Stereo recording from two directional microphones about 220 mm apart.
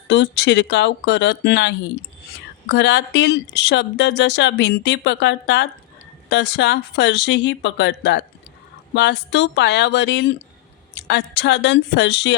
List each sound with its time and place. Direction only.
0.1 s speech: 55° left (ahead or behind)